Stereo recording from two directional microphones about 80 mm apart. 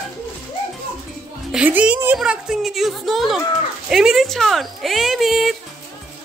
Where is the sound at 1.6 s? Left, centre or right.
Centre.